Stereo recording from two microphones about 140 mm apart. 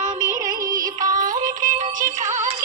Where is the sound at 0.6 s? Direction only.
25° right (ahead or behind).